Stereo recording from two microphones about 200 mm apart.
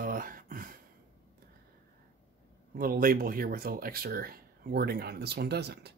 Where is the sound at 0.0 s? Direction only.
45° right (ahead or behind).